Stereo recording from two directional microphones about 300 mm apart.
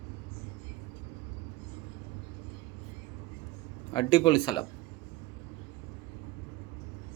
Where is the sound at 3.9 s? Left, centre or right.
Centre.